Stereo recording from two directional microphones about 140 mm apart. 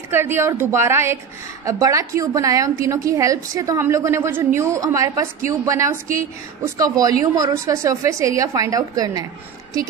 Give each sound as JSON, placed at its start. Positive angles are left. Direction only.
{"t": 0.1, "sound": "a woman's voice", "side_deg": -15}